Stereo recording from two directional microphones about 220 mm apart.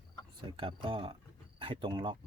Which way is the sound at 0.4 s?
25° right (ahead or behind).